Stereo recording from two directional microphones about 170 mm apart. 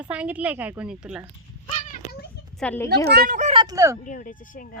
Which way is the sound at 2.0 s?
40° right (ahead or behind).